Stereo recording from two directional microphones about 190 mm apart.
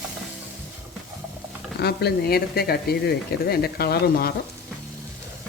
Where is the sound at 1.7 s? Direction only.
60° left (ahead or behind).